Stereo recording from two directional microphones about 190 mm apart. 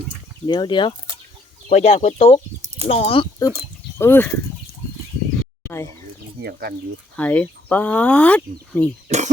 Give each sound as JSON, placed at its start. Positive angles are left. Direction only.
{"t": 0.4, "sound": "speech", "side_deg": 25}
{"t": 3.9, "sound": "speech", "side_deg": 10}
{"t": 5.6, "sound": "a sound", "side_deg": 15}
{"t": 6.4, "sound": "speech", "side_deg": -55}
{"t": 7.2, "sound": "speech", "side_deg": 10}
{"t": 9.0, "sound": "speech", "side_deg": -40}